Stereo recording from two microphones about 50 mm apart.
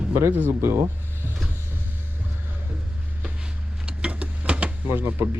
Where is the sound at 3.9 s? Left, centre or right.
Right.